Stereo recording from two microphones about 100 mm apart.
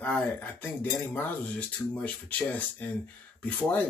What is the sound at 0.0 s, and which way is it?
Speech, 15° left (ahead or behind).